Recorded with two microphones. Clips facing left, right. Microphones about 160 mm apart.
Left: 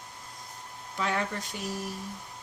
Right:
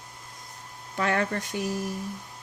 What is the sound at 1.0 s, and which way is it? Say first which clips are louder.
Speech: right 4 dB; 60° right (ahead or behind).